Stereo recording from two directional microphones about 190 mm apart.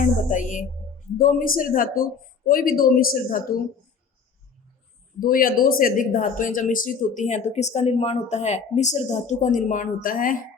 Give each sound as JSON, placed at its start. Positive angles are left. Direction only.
{"t": 0.0, "sound": "speech", "side_deg": 40}
{"t": 5.2, "sound": "speech", "side_deg": 50}